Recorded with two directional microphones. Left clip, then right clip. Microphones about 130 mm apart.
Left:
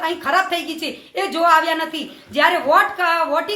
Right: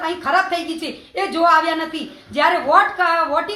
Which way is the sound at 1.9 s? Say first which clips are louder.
Left 1 dB; 45° left (ahead or behind).